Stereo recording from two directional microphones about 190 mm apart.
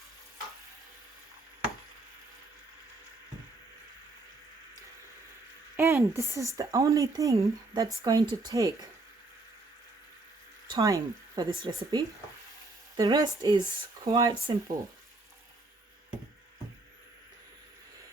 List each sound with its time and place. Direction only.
5.7 s speech: 15° right (ahead or behind)
10.7 s speech: 15° right (ahead or behind)